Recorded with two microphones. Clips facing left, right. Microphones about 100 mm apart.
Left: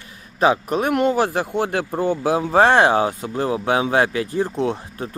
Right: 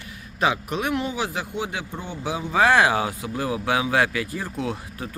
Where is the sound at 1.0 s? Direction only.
55° left (ahead or behind).